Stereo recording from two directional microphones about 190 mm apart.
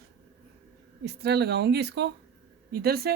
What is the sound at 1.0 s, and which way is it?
Speech, 60° right (ahead or behind).